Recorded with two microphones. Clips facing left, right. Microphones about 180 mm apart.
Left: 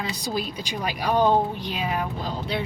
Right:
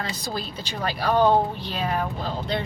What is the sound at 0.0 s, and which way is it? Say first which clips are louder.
A woman's voice: left 2 dB; 15° left (ahead or behind).